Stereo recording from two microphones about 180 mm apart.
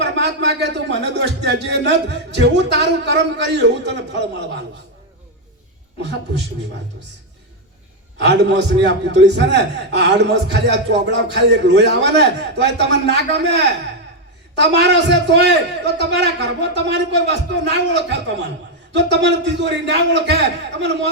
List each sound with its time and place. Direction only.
0.0 s a man's voice: 70° right (ahead or behind)
6.0 s a man's voice: 70° right (ahead or behind)
8.2 s a man's voice: 70° right (ahead or behind)